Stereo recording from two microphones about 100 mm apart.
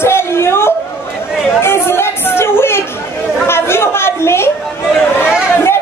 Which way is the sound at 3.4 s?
25° left (ahead or behind).